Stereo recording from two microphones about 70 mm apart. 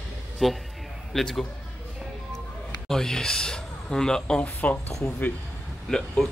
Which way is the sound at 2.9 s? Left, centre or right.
Centre.